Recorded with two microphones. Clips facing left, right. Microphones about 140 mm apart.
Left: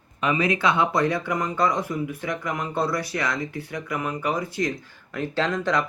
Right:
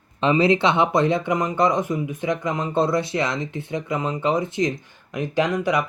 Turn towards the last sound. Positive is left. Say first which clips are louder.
# right 3 dB
turn(degrees=-10)  # may be behind; listen again after turning